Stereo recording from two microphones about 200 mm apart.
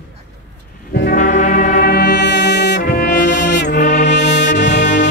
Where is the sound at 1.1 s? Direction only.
40° left (ahead or behind); by 3.8 s 60° left (ahead or behind).